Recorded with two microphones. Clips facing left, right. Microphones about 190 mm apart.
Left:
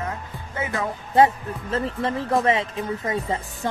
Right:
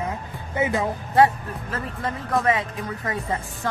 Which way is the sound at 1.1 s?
25° left (ahead or behind).